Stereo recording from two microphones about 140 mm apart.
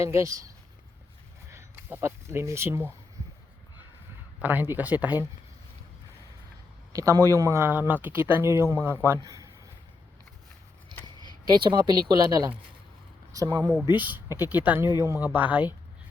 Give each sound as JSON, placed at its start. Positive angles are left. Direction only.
{"t": 0.0, "sound": "speech", "side_deg": -20}
{"t": 4.4, "sound": "speech", "side_deg": -15}
{"t": 6.9, "sound": "speech", "side_deg": -25}
{"t": 9.2, "sound": "a sound", "side_deg": -25}
{"t": 11.4, "sound": "speech", "side_deg": -35}
{"t": 13.8, "sound": "speech", "side_deg": -10}